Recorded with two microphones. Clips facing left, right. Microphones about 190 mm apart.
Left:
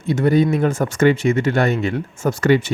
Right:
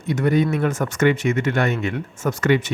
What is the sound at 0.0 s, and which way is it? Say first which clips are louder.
Speech: left 3 dB; 30° left (ahead or behind).